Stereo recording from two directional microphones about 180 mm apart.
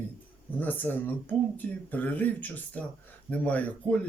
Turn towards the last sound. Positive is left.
turn(degrees=10)  # may be behind; listen again after turning